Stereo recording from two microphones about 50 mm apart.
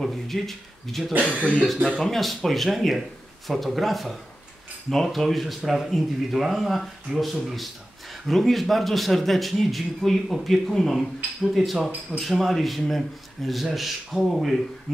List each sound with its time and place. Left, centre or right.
0.0 s speech: centre
1.2 s speech: right
2.0 s speech: centre